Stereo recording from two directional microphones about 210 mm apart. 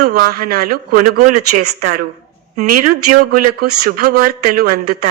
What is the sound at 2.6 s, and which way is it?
Speech, 45° right (ahead or behind).